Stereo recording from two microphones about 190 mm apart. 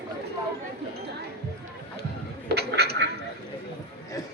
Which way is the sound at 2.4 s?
60° right (ahead or behind).